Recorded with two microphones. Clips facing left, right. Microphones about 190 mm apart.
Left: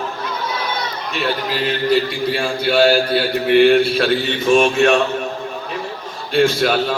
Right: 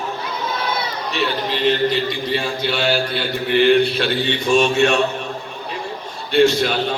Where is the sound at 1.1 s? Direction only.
5° left (ahead or behind).